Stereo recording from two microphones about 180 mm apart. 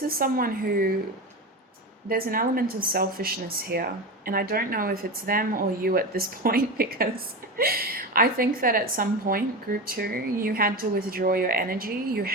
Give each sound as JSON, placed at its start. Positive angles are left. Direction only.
{"t": 0.1, "sound": "speech", "side_deg": -55}
{"t": 2.0, "sound": "speech", "side_deg": -55}